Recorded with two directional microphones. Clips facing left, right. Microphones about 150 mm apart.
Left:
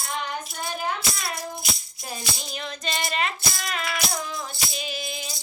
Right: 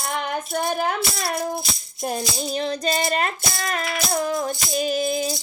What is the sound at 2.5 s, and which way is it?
Music, 35° right (ahead or behind).